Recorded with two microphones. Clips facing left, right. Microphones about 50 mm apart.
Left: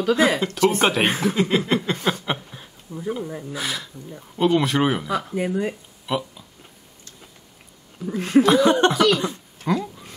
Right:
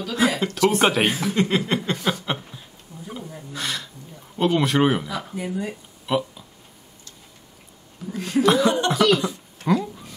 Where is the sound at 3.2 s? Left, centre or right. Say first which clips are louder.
Left 6 dB; left.